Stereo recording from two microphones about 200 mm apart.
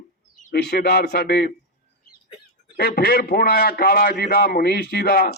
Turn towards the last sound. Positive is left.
turn(degrees=50)  # may be behind; listen again after turning